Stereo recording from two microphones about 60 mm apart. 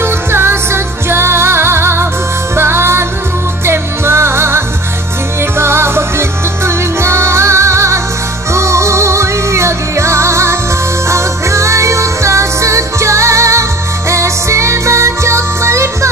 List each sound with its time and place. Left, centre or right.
0.0 s music: right